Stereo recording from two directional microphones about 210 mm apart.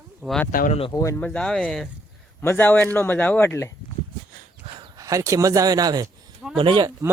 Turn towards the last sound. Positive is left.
turn(degrees=-20)  # may be behind; listen again after turning